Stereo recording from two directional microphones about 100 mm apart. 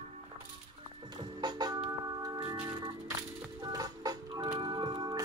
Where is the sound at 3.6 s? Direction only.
40° right (ahead or behind).